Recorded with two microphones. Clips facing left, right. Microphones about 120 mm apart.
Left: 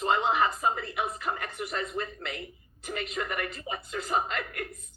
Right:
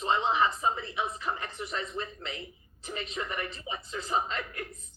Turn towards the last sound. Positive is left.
turn(degrees=55)  # may be behind; listen again after turning